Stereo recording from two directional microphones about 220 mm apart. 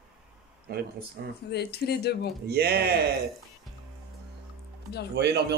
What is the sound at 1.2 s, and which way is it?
Speech, 45° right (ahead or behind).